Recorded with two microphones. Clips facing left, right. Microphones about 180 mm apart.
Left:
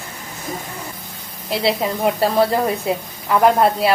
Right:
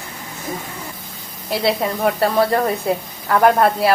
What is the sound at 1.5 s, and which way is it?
A woman's voice, centre (ahead or behind).